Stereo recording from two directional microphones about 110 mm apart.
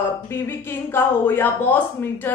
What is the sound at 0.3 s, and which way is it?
A woman's voice, 20° left (ahead or behind).